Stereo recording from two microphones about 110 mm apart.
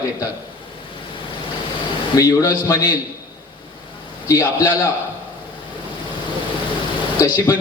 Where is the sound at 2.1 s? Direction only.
30° left (ahead or behind).